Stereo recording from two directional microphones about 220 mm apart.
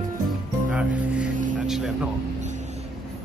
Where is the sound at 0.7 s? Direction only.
5° right (ahead or behind).